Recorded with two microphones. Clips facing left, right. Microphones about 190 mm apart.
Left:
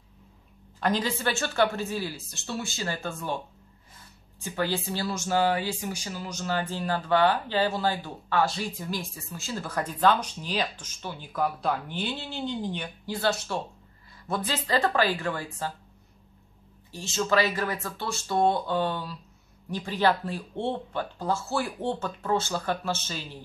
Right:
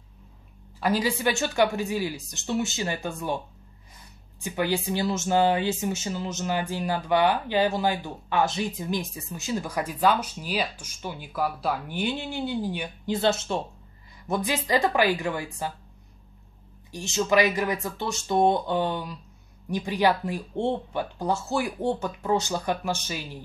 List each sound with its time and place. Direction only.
0.7 s speech: 10° right (ahead or behind)
4.4 s speech: 15° right (ahead or behind)
16.9 s speech: 15° right (ahead or behind)